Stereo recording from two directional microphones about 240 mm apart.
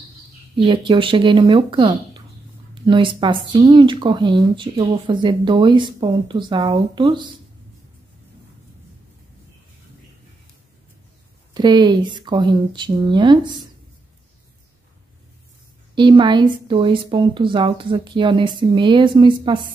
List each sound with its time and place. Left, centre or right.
0.6 s speech: right
11.5 s speech: centre
15.9 s speech: centre